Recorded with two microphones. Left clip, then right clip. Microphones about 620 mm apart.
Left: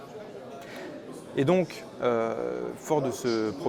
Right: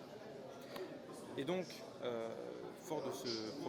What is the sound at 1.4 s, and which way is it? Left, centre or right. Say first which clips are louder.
Speech: left 17 dB; left.